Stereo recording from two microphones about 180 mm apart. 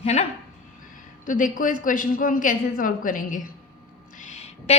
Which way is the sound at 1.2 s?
50° left (ahead or behind).